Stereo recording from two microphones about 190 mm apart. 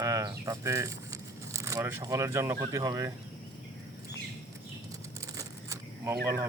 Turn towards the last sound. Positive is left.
turn(degrees=-15)  # may be behind; listen again after turning